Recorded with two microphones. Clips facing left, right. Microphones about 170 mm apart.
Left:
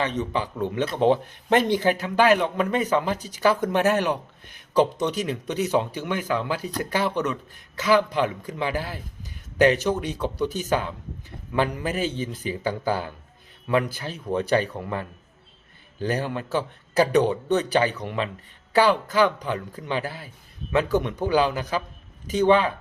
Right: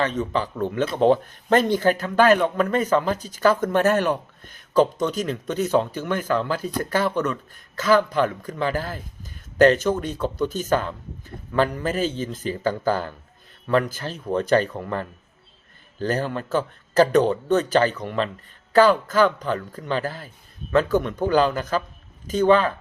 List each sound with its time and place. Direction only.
0.0 s a man's voice: 20° left (ahead or behind)